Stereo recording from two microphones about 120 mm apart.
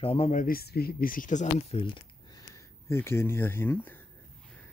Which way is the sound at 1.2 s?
90° left.